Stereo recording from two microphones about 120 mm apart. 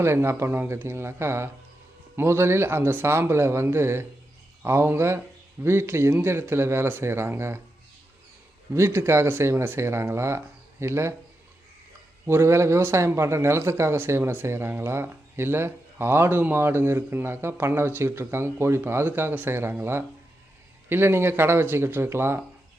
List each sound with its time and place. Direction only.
0.0 s a man's voice: 20° right (ahead or behind)
8.7 s a man's voice: 20° right (ahead or behind)
12.2 s a man's voice: 20° right (ahead or behind)